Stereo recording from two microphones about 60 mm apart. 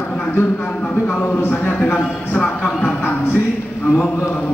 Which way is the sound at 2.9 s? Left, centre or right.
Left.